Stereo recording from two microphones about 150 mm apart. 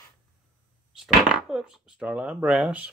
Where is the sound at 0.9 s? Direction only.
5° right (ahead or behind).